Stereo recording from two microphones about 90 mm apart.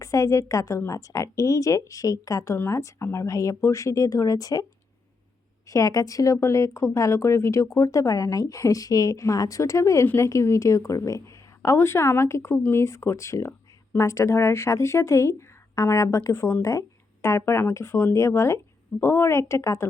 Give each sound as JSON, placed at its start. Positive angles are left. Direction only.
{"t": 0.0, "sound": "speech", "side_deg": 35}
{"t": 5.6, "sound": "speech", "side_deg": 40}